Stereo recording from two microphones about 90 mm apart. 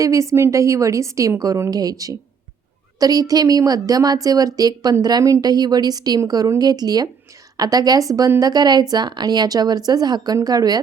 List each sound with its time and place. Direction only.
0.0 s a woman's voice: 35° right (ahead or behind)